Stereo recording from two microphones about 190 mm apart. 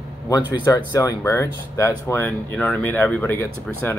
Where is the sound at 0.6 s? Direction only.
20° left (ahead or behind).